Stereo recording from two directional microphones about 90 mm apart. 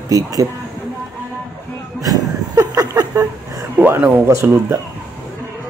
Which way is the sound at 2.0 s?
40° right (ahead or behind).